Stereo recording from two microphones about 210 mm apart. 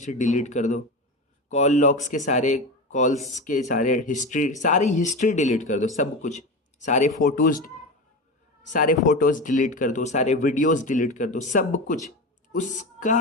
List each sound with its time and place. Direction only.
0.0 s a woman's voice: 35° left (ahead or behind)